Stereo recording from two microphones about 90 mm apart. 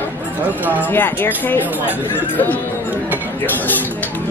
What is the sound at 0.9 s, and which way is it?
Speech, 25° left (ahead or behind).